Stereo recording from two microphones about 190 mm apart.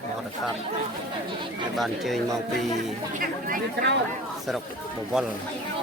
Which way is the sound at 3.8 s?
65° right (ahead or behind).